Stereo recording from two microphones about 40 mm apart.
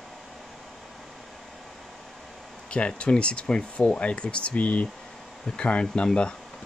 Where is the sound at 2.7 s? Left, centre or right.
Left.